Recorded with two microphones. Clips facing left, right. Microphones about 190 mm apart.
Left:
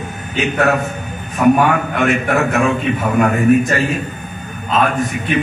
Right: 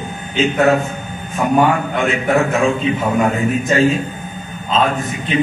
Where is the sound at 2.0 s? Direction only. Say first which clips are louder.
Even; 70° left (ahead or behind).